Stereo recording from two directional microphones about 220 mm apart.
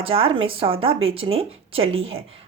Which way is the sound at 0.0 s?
25° right (ahead or behind).